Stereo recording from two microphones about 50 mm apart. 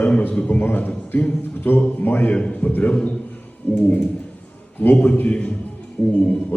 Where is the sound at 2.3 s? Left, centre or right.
Left.